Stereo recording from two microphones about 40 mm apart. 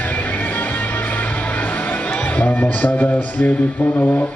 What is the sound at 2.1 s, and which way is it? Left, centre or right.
A man's voice, left.